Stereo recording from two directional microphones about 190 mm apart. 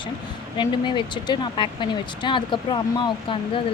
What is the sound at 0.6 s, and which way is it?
Speech, 25° left (ahead or behind).